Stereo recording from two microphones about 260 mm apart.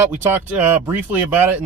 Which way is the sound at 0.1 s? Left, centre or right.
Centre.